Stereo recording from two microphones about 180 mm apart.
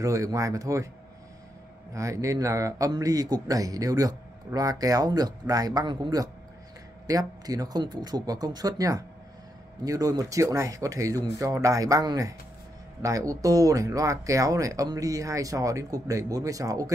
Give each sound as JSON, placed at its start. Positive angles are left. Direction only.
{"t": 0.0, "sound": "speech", "side_deg": -15}
{"t": 2.0, "sound": "a man's voice", "side_deg": -15}